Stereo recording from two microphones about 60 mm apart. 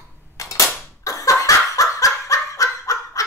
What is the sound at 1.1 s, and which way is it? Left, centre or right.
Laughter, left.